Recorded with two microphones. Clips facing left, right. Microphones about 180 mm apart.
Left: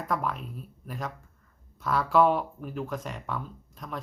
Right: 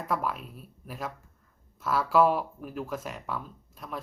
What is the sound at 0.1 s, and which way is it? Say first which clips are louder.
Speech: even; 5° right (ahead or behind).